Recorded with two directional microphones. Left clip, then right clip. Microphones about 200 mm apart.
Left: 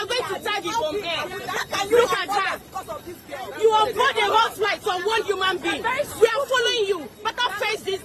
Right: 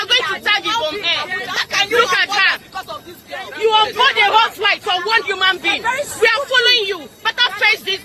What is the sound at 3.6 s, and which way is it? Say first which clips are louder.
A woman's voice: right 5 dB; 5° right (ahead or behind).